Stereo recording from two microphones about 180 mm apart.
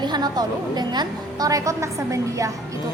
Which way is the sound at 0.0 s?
25° right (ahead or behind).